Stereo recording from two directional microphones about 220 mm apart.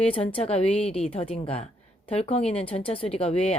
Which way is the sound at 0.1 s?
25° left (ahead or behind).